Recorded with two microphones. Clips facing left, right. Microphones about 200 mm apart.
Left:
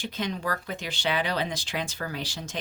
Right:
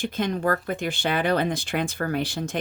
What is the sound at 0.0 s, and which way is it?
Speech, 55° right (ahead or behind).